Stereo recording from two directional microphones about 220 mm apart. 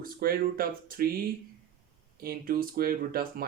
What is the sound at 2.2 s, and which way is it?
Speech, 40° right (ahead or behind).